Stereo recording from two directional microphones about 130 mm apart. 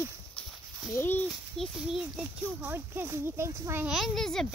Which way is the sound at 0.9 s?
20° left (ahead or behind).